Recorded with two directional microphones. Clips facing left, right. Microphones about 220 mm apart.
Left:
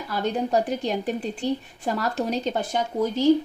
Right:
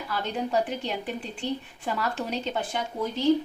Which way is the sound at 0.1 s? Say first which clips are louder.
Left 5 dB; 40° left (ahead or behind).